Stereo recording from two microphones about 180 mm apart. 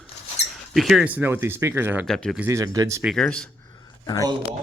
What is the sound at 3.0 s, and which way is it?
Speech, 5° left (ahead or behind).